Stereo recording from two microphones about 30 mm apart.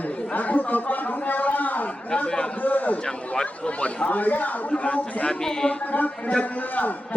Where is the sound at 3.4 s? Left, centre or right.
Left.